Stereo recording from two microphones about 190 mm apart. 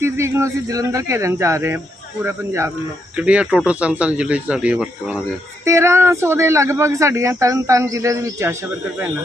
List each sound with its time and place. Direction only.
0.0 s speech: 15° right (ahead or behind)